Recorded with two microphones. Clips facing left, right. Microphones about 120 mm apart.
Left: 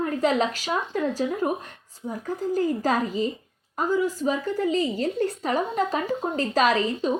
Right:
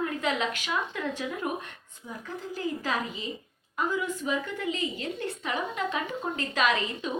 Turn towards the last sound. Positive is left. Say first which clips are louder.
# left 6 dB
turn(degrees=35)  # may be behind; listen again after turning